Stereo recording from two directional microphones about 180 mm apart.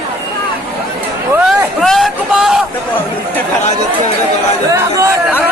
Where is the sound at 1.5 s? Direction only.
Centre (ahead or behind).